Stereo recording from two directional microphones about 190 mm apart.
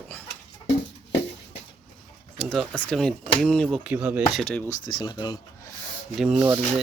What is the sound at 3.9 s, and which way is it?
Speech, 10° right (ahead or behind).